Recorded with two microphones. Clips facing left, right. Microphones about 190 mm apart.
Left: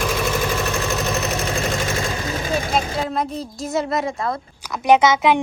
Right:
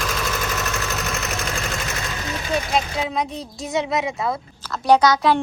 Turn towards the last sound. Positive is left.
turn(degrees=20)  # may be behind; listen again after turning